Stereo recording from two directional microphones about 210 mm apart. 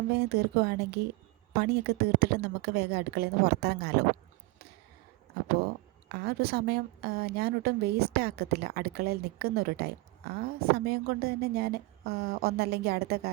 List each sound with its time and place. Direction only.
0.3 s a woman's voice: 50° right (ahead or behind)
6.1 s a woman's voice: 50° right (ahead or behind)